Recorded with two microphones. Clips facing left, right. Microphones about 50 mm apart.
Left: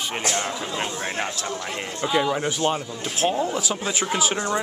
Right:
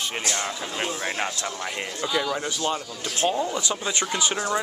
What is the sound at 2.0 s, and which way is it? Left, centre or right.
Speech, centre.